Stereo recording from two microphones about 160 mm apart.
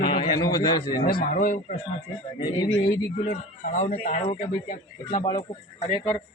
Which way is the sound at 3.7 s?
50° left (ahead or behind).